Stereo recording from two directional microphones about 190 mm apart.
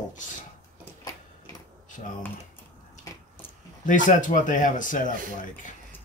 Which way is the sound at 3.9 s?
45° left (ahead or behind).